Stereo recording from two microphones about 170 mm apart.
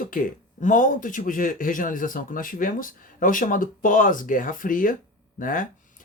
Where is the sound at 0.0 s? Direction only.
55° left (ahead or behind).